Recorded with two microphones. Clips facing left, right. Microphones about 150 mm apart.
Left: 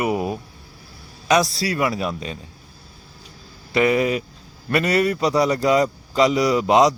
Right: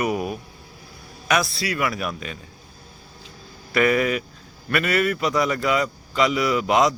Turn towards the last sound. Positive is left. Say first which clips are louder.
# left 3 dB
turn(degrees=30)  # may be behind; listen again after turning